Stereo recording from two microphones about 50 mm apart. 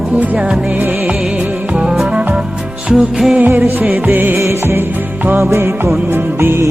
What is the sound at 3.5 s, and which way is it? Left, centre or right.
Music, right.